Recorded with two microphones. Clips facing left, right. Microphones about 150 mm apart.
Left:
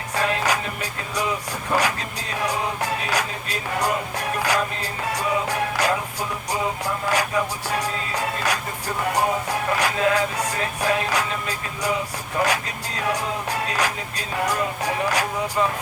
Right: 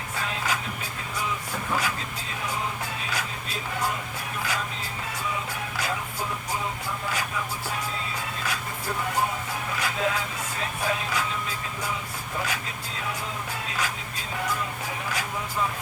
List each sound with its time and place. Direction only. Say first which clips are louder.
0.2 s music: left 8 dB; 75° left (ahead or behind)
1.7 s music: left 7 dB; 75° left (ahead or behind)